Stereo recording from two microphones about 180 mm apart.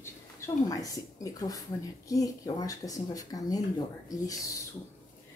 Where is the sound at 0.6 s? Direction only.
20° left (ahead or behind).